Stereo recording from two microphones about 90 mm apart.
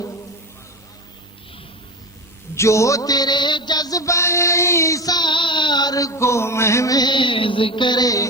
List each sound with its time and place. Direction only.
2.6 s mantra: 35° left (ahead or behind)